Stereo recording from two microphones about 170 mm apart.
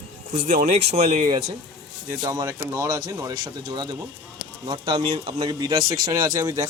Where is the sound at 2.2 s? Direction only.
20° right (ahead or behind).